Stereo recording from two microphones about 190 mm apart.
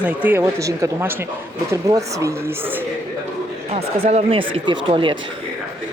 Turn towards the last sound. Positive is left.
turn(degrees=-25)  # may be behind; listen again after turning